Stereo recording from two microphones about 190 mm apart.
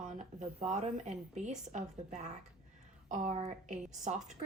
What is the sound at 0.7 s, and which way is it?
A woman's voice, 40° right (ahead or behind).